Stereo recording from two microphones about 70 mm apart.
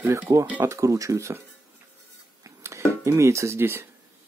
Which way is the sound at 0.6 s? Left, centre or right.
Right.